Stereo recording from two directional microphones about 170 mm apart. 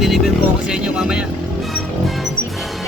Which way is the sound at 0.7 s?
5° right (ahead or behind).